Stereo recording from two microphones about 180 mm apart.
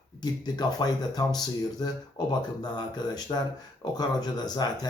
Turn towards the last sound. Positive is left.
turn(degrees=20)  # may be behind; listen again after turning